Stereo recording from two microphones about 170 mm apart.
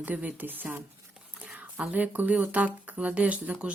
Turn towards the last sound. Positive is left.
turn(degrees=-5)  # may be behind; listen again after turning